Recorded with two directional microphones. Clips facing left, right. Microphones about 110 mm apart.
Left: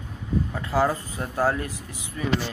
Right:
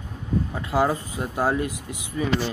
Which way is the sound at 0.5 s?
15° right (ahead or behind).